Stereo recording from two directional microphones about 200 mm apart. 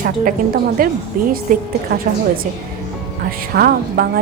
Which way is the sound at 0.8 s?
45° right (ahead or behind).